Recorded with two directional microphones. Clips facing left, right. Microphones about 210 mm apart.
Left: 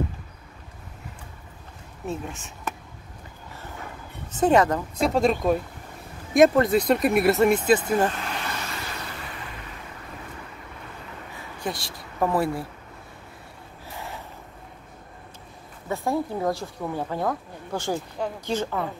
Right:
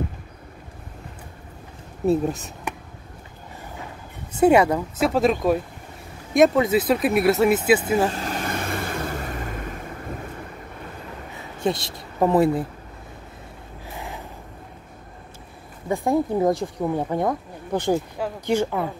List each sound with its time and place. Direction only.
2.0 s speech: 40° right (ahead or behind)
4.4 s speech: 10° right (ahead or behind)
8.1 s vehicle: 40° right (ahead or behind)
11.6 s speech: 20° right (ahead or behind)
13.9 s gasp: 15° right (ahead or behind)
15.9 s speech: 15° right (ahead or behind)
18.2 s speech: 5° right (ahead or behind)